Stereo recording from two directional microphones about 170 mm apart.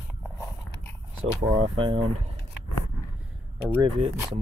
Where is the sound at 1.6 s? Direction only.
30° right (ahead or behind).